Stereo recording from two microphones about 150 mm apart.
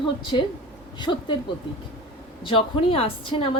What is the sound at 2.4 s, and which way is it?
A woman's voice, 35° left (ahead or behind).